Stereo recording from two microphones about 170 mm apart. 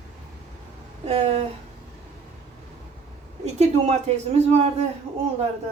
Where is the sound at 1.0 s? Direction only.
40° right (ahead or behind).